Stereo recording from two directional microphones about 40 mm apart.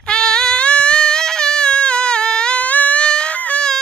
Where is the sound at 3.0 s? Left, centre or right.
Left.